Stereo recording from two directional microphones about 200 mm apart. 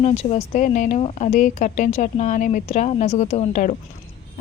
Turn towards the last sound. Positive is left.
turn(degrees=35)  # may be behind; listen again after turning